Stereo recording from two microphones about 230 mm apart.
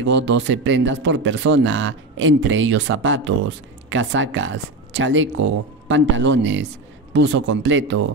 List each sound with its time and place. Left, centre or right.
0.0 s a man's voice: right